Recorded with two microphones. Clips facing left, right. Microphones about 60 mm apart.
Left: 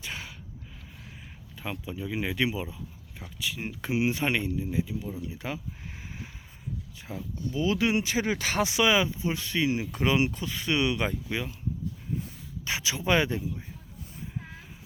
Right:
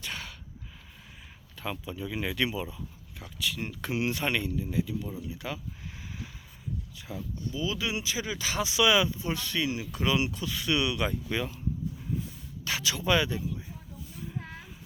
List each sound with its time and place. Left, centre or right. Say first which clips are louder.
0.0 s a sound: even; centre
1.5 s speech: even; centre; by 5.5 s left
7.1 s speech: left 1 dB; left
7.5 s speech: left 7 dB; left
8.8 s speech: right 1 dB; left
11.3 s speech: right 1 dB; centre
12.6 s speech: even; left
13.1 s speech: left 2 dB; left